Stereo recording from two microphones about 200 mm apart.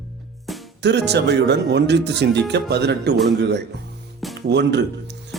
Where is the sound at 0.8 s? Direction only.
55° right (ahead or behind).